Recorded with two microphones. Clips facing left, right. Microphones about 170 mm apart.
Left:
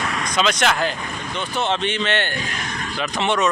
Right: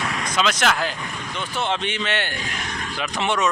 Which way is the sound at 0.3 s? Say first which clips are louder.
Left 2 dB; centre (ahead or behind).